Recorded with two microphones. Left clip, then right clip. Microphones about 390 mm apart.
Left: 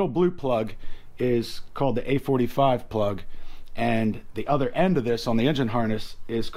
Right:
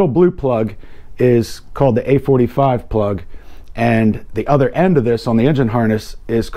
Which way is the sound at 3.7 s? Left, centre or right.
Right.